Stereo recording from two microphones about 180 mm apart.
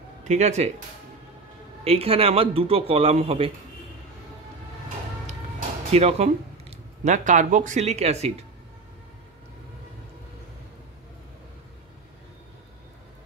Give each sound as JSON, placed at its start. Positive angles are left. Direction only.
{"t": 0.2, "sound": "speech", "side_deg": -40}
{"t": 1.9, "sound": "a man's voice", "side_deg": -30}
{"t": 5.9, "sound": "a man's voice", "side_deg": -35}